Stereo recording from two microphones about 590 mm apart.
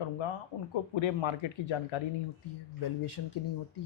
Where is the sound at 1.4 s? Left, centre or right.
Left.